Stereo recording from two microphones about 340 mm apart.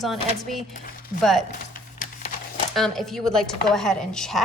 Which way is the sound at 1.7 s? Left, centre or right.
Left.